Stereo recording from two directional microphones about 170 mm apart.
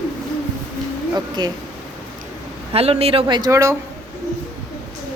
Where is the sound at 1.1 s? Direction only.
25° right (ahead or behind).